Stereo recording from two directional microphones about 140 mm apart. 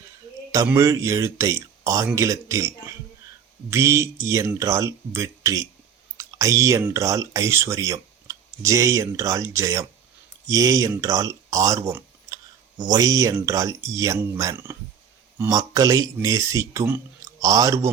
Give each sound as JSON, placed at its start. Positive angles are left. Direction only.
{"t": 0.5, "sound": "speech", "side_deg": -25}
{"t": 11.9, "sound": "a sound", "side_deg": -20}
{"t": 13.3, "sound": "speech", "side_deg": -25}